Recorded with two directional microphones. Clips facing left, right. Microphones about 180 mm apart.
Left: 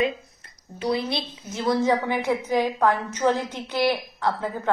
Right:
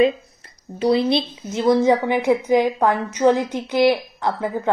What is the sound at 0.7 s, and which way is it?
A woman's voice, 25° right (ahead or behind).